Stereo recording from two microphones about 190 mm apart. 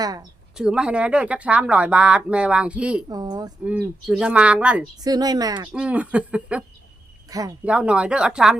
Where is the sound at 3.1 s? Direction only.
20° right (ahead or behind).